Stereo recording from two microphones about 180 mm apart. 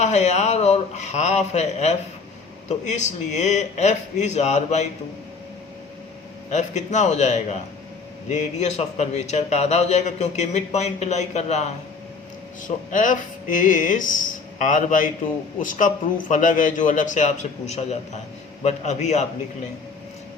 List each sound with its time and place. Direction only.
0.0 s a man's voice: 40° left (ahead or behind)
6.5 s a man's voice: 40° left (ahead or behind)